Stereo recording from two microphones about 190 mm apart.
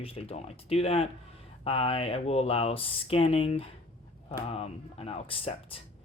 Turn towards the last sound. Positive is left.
turn(degrees=30)  # may be behind; listen again after turning